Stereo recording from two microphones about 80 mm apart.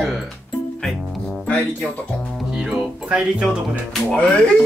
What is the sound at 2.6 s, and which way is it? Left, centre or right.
Music, centre.